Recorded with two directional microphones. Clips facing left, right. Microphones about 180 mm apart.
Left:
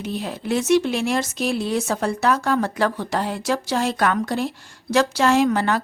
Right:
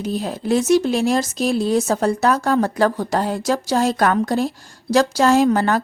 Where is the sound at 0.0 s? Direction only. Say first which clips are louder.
Right 4 dB; 40° right (ahead or behind).